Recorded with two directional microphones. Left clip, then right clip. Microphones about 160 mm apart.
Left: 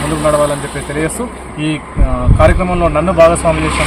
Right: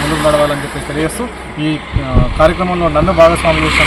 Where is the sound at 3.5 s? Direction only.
40° left (ahead or behind).